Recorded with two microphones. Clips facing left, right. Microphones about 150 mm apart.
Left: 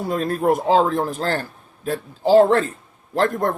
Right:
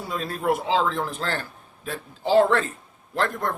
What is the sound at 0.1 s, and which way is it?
A man's voice, 50° left (ahead or behind).